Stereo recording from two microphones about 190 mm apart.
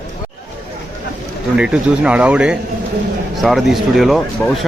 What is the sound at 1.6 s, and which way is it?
Speech, 5° right (ahead or behind).